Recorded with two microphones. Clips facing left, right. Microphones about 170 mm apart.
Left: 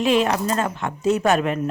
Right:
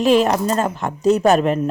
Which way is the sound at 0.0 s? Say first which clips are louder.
Right 4 dB; 40° right (ahead or behind).